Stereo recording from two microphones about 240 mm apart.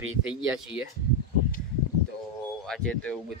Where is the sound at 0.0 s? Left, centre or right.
Right.